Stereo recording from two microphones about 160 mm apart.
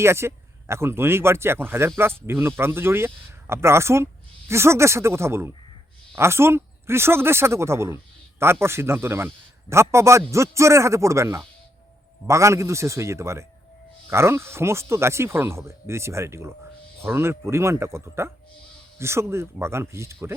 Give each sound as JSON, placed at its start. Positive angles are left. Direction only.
{"t": 0.0, "sound": "speech", "side_deg": -15}